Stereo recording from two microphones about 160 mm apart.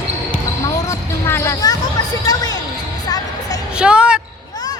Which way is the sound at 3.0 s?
25° left (ahead or behind).